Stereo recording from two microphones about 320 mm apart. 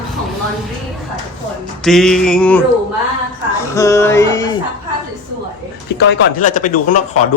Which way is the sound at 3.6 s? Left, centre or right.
Centre.